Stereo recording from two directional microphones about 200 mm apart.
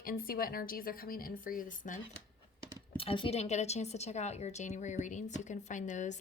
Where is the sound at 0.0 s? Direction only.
45° left (ahead or behind).